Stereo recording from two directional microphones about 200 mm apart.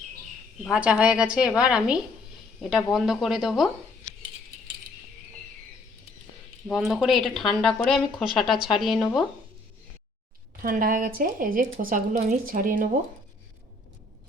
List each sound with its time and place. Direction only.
0.6 s speech: 5° right (ahead or behind)
6.7 s speech: centre (ahead or behind)
10.6 s speech: 45° right (ahead or behind)